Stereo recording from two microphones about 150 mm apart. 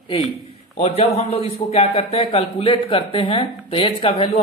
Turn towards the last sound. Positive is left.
turn(degrees=40)  # may be behind; listen again after turning